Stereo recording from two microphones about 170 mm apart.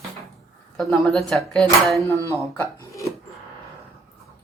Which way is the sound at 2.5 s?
15° left (ahead or behind).